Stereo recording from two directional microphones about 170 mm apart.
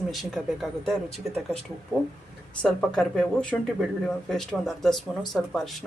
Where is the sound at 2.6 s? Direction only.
5° left (ahead or behind).